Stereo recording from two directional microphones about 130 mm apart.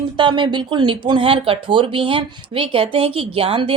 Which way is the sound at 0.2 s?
35° right (ahead or behind).